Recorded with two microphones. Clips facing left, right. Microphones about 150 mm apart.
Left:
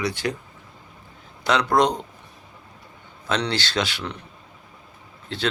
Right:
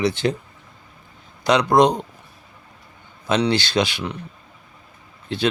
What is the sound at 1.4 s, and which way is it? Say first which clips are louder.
Speech: right 4 dB; 15° right (ahead or behind).